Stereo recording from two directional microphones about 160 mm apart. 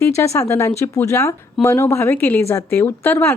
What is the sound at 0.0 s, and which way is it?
A woman's voice, 20° left (ahead or behind).